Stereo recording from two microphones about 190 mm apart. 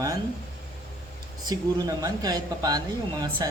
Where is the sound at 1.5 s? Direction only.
20° right (ahead or behind).